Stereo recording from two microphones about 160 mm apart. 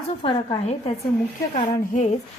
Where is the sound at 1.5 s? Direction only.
45° left (ahead or behind).